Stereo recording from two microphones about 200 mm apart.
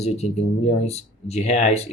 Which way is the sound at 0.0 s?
30° left (ahead or behind).